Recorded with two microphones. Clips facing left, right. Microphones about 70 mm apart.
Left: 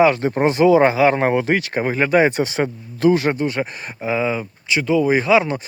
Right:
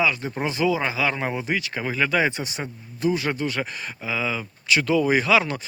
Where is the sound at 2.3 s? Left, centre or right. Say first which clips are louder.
Left 9 dB; left.